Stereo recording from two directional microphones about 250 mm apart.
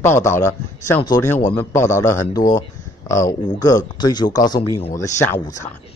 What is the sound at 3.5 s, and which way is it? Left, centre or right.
Speech, centre.